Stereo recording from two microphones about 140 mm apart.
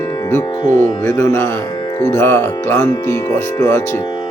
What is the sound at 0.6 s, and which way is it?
Speech, 65° right (ahead or behind).